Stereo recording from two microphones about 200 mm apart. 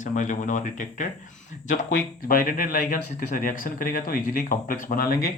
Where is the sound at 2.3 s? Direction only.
45° left (ahead or behind).